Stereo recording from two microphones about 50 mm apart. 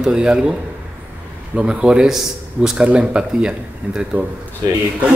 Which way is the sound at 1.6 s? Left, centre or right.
Centre.